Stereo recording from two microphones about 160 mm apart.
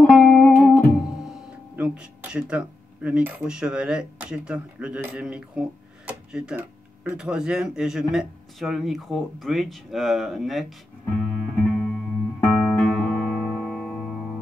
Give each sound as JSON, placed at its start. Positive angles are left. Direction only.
{"t": 0.0, "sound": "music", "side_deg": 5}
{"t": 1.8, "sound": "speech", "side_deg": -5}
{"t": 11.1, "sound": "music", "side_deg": 10}